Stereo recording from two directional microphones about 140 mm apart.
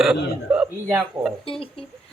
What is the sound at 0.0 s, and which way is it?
Speech, 5° right (ahead or behind).